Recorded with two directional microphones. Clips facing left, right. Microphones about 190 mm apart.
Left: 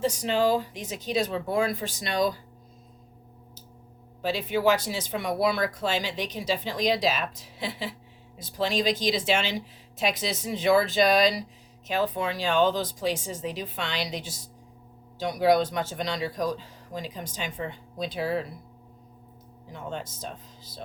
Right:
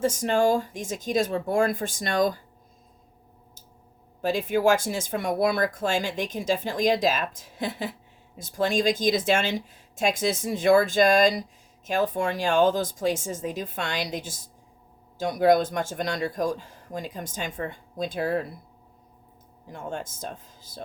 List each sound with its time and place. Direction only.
0.0 s speech: 50° right (ahead or behind)
4.2 s speech: 50° right (ahead or behind)
19.7 s speech: 50° right (ahead or behind)